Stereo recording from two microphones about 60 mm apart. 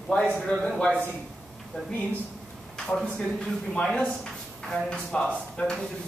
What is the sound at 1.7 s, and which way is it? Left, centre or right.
Speech, centre.